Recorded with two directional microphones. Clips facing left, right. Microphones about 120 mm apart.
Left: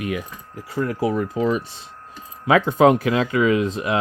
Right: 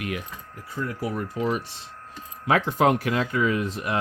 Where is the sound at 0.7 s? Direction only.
85° left.